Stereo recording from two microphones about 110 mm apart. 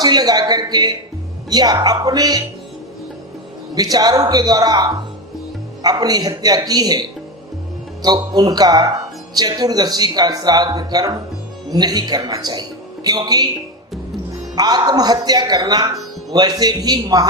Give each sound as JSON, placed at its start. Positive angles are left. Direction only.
{"t": 0.0, "sound": "speech", "side_deg": -40}
{"t": 3.8, "sound": "speech", "side_deg": -35}
{"t": 8.0, "sound": "speech", "side_deg": -35}
{"t": 14.5, "sound": "speech", "side_deg": -35}